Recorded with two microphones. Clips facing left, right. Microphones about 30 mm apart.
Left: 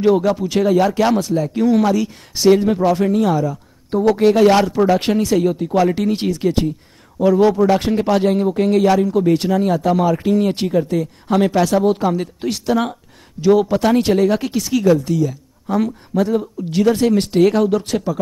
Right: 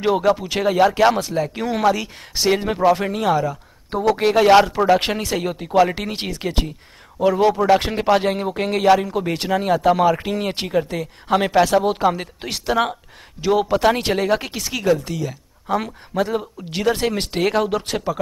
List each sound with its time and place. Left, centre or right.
0.0 s speech: centre